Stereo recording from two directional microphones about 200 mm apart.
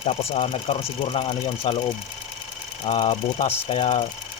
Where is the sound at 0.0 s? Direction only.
30° left (ahead or behind).